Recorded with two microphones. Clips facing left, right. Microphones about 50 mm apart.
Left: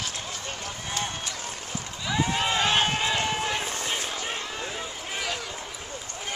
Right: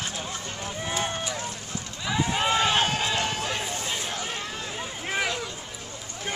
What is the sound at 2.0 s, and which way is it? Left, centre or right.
Run, centre.